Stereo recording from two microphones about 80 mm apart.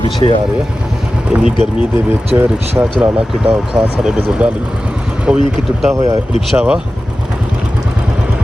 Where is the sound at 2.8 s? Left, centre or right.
Right.